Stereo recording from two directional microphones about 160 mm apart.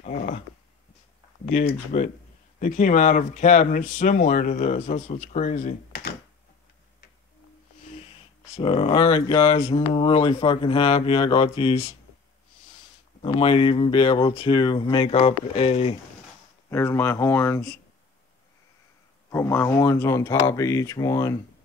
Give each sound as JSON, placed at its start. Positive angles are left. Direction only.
{"t": 0.0, "sound": "a sound", "side_deg": 50}
{"t": 1.9, "sound": "speech", "side_deg": 45}
{"t": 8.5, "sound": "speech", "side_deg": 35}
{"t": 9.7, "sound": "speech", "side_deg": 35}
{"t": 13.2, "sound": "speech", "side_deg": 35}
{"t": 16.7, "sound": "speech", "side_deg": 15}
{"t": 19.3, "sound": "speech", "side_deg": 15}